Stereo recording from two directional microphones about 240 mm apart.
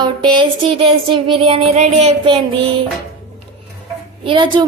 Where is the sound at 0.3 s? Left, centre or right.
Right.